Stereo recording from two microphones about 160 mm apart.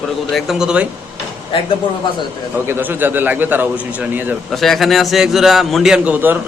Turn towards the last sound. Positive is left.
turn(degrees=-10)  # may be behind; listen again after turning